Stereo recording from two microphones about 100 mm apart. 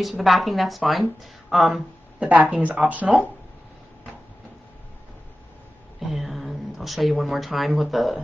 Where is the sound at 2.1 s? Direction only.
15° right (ahead or behind).